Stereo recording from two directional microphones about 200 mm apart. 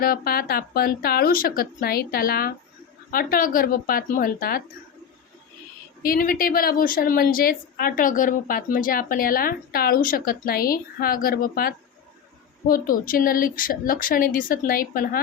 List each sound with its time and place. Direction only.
0.0 s a woman's voice: 50° left (ahead or behind)
6.0 s a woman's voice: 45° left (ahead or behind)